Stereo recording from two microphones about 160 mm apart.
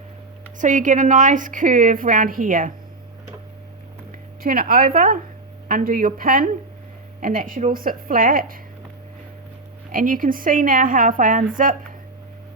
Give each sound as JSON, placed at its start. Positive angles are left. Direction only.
{"t": 0.6, "sound": "a woman's voice", "side_deg": -50}
{"t": 4.4, "sound": "a woman's voice", "side_deg": -60}
{"t": 9.9, "sound": "a woman's voice", "side_deg": -55}